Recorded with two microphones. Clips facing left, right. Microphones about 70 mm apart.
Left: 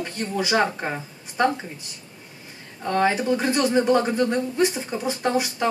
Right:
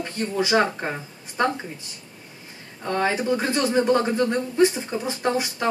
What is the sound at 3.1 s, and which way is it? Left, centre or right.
Speech, right.